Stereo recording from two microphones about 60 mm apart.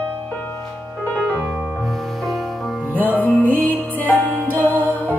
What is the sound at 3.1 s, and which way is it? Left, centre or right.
Music, left.